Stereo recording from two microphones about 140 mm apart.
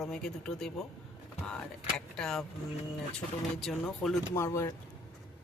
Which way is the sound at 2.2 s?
5° left (ahead or behind).